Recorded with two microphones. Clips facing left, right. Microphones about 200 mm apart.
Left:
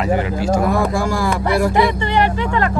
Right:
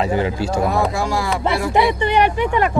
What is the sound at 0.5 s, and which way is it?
Speech, 50° left (ahead or behind).